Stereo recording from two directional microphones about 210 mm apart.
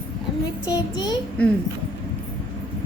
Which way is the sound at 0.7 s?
20° left (ahead or behind).